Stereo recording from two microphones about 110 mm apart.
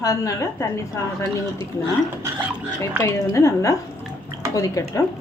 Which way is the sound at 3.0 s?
25° left (ahead or behind).